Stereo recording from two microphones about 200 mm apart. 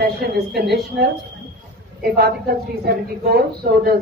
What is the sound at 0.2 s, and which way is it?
A woman's voice, 50° right (ahead or behind).